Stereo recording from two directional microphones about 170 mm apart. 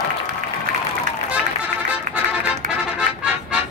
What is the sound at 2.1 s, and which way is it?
Music, 50° right (ahead or behind).